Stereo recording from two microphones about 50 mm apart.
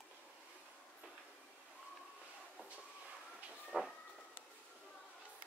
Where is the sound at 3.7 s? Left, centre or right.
Right.